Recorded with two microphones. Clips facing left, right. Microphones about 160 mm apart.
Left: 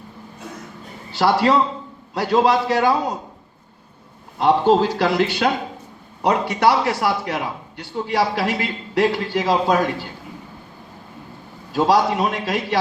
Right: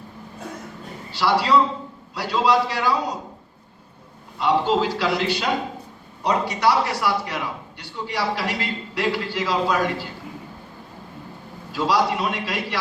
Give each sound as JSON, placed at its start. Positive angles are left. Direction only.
{"t": 1.1, "sound": "a man's voice", "side_deg": 50}
{"t": 4.4, "sound": "a man's voice", "side_deg": 50}
{"t": 11.7, "sound": "a man's voice", "side_deg": 50}